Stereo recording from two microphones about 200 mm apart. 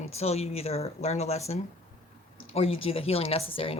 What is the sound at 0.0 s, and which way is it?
Speech, 30° left (ahead or behind).